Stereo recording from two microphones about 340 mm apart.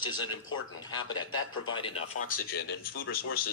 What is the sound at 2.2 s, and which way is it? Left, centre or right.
Speech, left.